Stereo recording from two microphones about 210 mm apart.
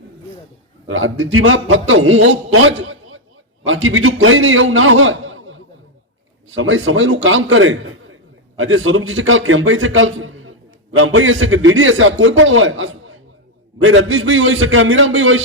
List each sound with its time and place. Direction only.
0.9 s a man's voice: 70° right (ahead or behind)